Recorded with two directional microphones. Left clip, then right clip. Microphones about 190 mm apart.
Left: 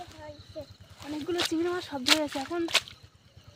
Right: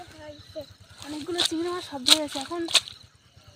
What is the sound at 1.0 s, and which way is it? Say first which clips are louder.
Speech: right 3 dB; 10° left (ahead or behind).